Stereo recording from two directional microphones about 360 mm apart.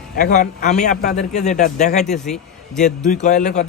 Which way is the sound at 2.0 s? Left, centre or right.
Centre.